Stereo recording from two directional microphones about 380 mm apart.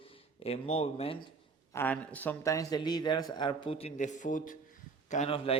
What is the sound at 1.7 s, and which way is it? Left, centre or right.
A man's voice, centre.